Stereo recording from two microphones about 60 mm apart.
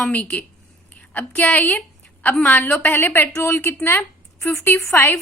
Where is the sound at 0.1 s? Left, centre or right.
Left.